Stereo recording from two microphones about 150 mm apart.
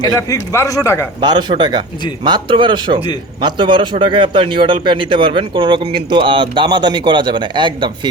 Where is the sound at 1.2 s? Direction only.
30° right (ahead or behind).